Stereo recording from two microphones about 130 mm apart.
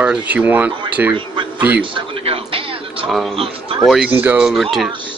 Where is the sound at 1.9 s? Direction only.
45° right (ahead or behind).